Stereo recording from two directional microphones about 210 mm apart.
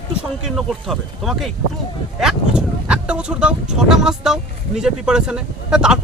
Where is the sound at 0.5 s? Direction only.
Centre (ahead or behind).